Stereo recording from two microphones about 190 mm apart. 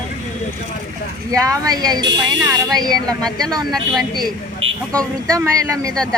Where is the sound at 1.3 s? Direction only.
15° right (ahead or behind).